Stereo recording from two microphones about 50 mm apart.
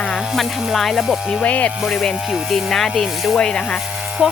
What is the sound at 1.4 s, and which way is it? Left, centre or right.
Speech, left.